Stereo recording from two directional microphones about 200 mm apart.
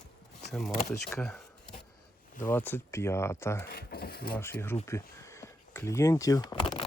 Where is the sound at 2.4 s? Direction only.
10° left (ahead or behind).